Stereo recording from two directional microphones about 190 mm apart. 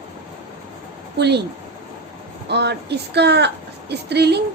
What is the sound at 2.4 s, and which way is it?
A woman's voice, 60° right (ahead or behind).